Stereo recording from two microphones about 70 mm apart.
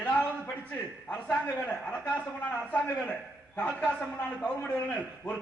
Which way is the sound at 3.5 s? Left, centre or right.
Centre.